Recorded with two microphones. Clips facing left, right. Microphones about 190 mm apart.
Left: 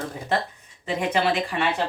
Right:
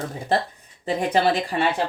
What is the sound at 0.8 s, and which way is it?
Speech, 35° right (ahead or behind).